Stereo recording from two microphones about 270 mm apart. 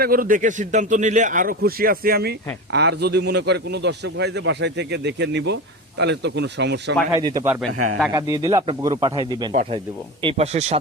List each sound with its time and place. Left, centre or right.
0.0 s a man's voice: right
7.4 s a man's voice: centre
7.7 s a man's voice: right
8.1 s a man's voice: centre